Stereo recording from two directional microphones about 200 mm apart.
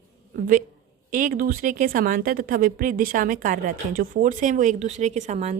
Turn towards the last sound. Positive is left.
turn(degrees=-35)  # may be behind; listen again after turning